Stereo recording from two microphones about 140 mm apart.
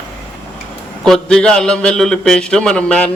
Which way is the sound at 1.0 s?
5° left (ahead or behind).